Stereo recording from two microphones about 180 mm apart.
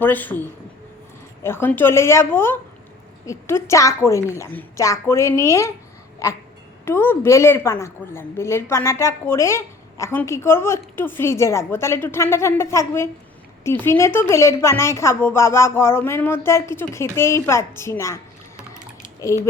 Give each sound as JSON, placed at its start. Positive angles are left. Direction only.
{"t": 0.0, "sound": "a woman's voice", "side_deg": 10}
{"t": 1.5, "sound": "a woman's voice", "side_deg": 10}